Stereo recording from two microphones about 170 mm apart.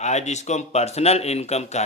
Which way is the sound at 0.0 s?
40° left (ahead or behind).